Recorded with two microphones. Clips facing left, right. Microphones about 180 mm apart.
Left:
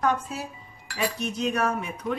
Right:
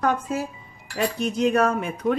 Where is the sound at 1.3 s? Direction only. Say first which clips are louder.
Right 8 dB; 50° right (ahead or behind).